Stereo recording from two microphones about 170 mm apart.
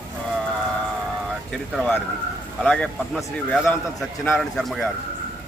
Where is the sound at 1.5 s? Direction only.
Centre (ahead or behind).